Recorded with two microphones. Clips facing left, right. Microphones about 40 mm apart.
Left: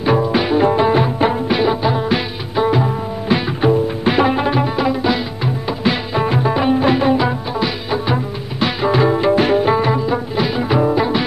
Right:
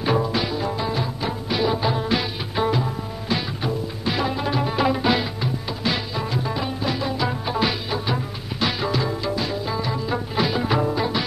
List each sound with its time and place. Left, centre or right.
0.0 s music: centre
0.4 s music: left
1.8 s music: centre
2.8 s music: left
4.7 s music: centre
5.4 s music: left
6.1 s music: left
7.9 s music: left
8.9 s music: left
10.0 s music: centre
10.9 s music: left